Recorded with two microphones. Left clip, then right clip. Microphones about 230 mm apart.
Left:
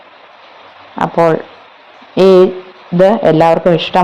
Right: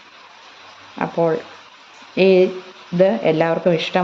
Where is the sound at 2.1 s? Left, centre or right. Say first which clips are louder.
Left 7 dB; left.